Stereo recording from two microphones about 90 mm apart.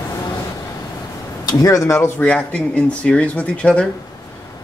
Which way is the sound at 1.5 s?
40° left (ahead or behind).